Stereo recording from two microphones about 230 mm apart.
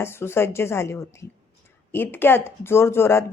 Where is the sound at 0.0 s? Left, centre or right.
Centre.